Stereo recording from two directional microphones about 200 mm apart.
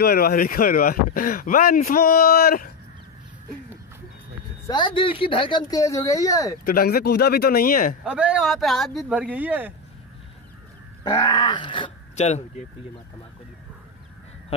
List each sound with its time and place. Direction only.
0.0 s speech: 50° left (ahead or behind)
4.6 s speech: 25° left (ahead or behind)
6.6 s speech: 50° left (ahead or behind)
8.0 s speech: 5° right (ahead or behind)
11.1 s speech: 20° left (ahead or behind)